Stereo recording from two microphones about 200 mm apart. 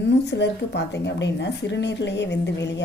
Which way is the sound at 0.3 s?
60° left (ahead or behind).